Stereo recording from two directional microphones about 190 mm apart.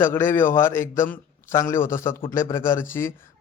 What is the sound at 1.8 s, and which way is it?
Speech, 45° left (ahead or behind).